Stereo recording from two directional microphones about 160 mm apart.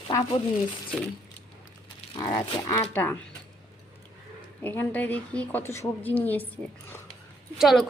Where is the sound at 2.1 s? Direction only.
20° left (ahead or behind).